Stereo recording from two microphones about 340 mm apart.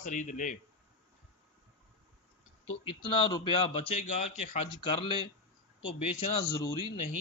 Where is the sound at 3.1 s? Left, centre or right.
Centre.